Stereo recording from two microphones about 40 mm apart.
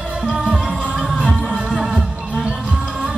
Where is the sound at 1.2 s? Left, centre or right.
Centre.